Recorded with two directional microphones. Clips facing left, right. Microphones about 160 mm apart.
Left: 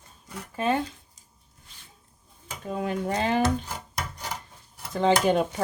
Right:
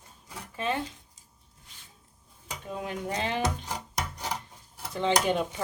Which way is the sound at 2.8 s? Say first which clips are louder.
Left 5 dB; 45° left (ahead or behind).